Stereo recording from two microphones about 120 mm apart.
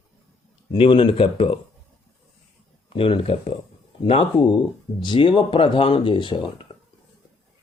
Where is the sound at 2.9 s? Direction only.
50° left (ahead or behind).